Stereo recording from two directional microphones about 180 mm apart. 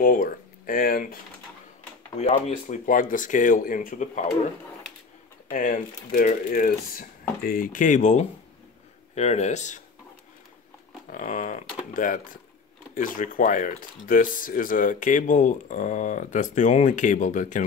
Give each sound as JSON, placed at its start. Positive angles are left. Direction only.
{"t": 0.0, "sound": "speech", "side_deg": 50}
{"t": 2.1, "sound": "speech", "side_deg": 35}
{"t": 5.5, "sound": "speech", "side_deg": 45}
{"t": 11.1, "sound": "a sound", "side_deg": 45}
{"t": 11.9, "sound": "speech", "side_deg": 50}